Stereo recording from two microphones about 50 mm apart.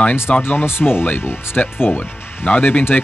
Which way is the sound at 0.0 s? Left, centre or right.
Left.